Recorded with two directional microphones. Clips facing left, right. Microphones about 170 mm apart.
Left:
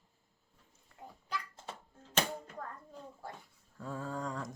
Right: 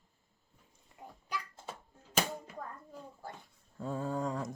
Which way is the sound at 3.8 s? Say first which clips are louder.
Right 4 dB; 25° right (ahead or behind).